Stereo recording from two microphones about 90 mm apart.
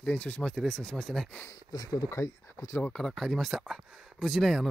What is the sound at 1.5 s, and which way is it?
Speech, 50° left (ahead or behind).